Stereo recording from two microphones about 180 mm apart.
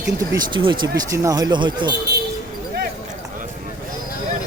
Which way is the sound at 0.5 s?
25° right (ahead or behind).